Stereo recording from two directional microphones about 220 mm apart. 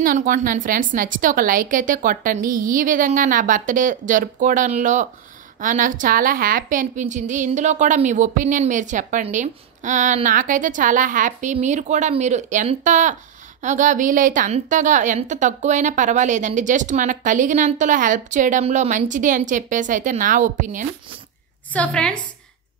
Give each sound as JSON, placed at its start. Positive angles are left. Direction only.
{"t": 0.0, "sound": "a woman's voice", "side_deg": -35}
{"t": 21.7, "sound": "a woman's voice", "side_deg": 5}